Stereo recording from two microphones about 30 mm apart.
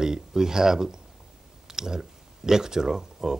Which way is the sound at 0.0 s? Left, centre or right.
Centre.